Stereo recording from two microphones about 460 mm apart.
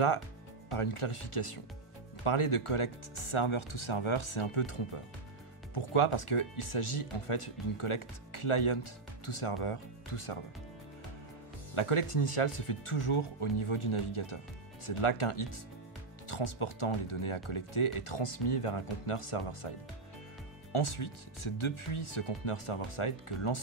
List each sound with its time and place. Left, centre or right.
0.7 s speech: left
11.7 s speech: left
20.7 s speech: left